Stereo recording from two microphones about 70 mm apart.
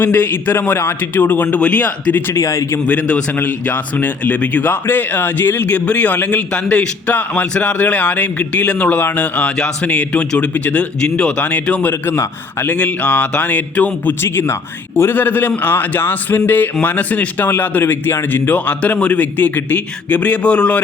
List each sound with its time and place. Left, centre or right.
0.0 s a man's voice: left
2.3 s speech: left
2.8 s a man's voice: left
14.2 s a man's voice: left; by 20.8 s centre